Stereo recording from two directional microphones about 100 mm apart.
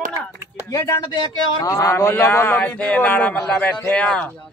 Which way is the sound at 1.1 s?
45° left (ahead or behind).